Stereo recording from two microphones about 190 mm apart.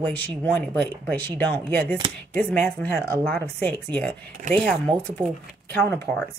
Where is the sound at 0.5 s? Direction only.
5° left (ahead or behind).